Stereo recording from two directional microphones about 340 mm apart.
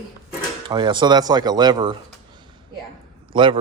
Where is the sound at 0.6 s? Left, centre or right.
Centre.